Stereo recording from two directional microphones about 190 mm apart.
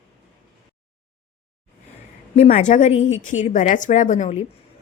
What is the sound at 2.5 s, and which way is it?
A woman's voice, 40° left (ahead or behind).